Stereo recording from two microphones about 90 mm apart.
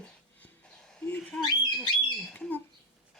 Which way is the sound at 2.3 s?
20° left (ahead or behind).